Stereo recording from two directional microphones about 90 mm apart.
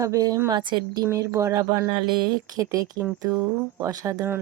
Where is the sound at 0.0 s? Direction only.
40° right (ahead or behind).